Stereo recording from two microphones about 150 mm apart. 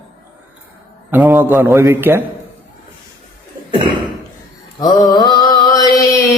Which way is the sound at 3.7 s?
35° right (ahead or behind).